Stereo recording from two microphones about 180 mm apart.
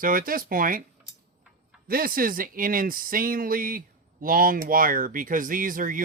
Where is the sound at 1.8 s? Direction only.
55° right (ahead or behind).